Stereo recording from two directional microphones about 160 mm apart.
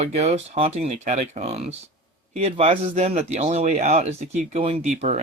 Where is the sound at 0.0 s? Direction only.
45° right (ahead or behind).